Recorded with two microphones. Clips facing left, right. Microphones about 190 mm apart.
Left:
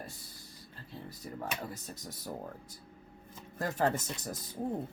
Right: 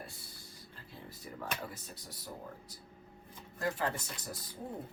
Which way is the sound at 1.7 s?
45° left (ahead or behind).